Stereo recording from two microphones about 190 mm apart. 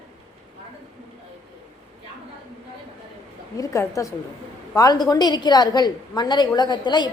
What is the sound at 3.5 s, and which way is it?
A woman's voice, 15° left (ahead or behind).